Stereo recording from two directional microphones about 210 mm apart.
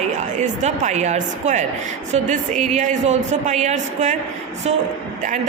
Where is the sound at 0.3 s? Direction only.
35° right (ahead or behind).